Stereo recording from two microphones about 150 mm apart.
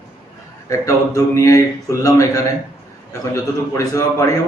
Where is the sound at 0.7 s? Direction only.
20° left (ahead or behind).